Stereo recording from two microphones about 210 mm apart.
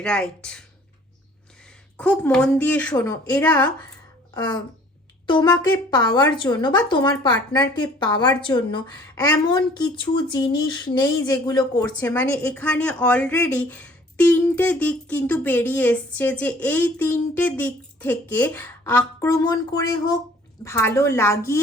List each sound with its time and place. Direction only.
0.0 s speech: 5° left (ahead or behind)
2.0 s a woman's voice: 5° left (ahead or behind)
4.4 s a woman's voice: 20° left (ahead or behind)